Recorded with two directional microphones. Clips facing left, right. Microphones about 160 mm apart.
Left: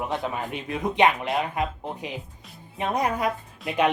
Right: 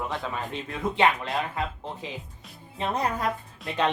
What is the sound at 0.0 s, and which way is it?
Speech, 20° left (ahead or behind).